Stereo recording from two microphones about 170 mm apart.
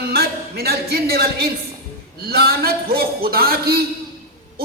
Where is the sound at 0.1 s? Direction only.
65° right (ahead or behind).